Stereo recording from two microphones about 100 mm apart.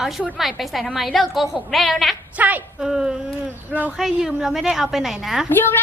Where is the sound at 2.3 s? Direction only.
15° right (ahead or behind).